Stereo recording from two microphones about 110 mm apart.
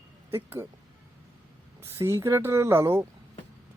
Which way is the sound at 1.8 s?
25° right (ahead or behind).